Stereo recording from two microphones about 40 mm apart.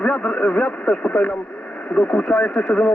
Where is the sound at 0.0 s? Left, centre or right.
Left.